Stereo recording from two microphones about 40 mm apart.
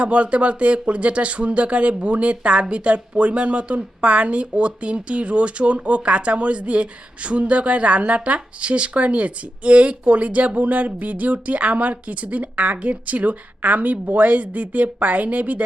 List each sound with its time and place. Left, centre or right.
0.0 s speech: right